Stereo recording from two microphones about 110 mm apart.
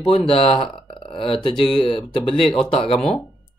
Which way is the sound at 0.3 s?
55° left (ahead or behind).